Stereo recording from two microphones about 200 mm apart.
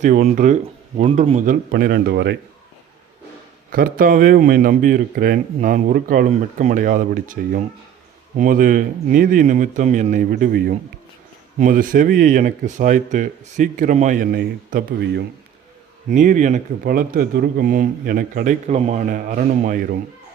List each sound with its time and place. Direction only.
0.0 s speech: 40° right (ahead or behind); by 2.4 s 60° right (ahead or behind)
3.7 s speech: 45° right (ahead or behind)
16.0 s speech: 40° right (ahead or behind)
18.7 s speech: 35° right (ahead or behind)